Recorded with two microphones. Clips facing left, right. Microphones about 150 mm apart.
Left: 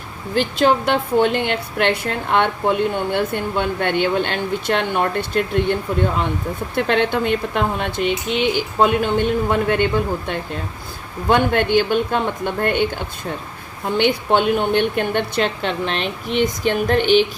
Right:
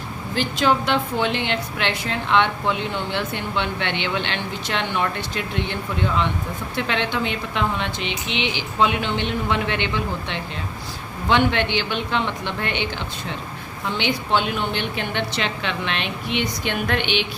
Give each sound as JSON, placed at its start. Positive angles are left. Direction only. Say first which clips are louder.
{"t": 0.3, "sound": "a woman's voice", "louder": "left 4 dB", "side_deg": 50}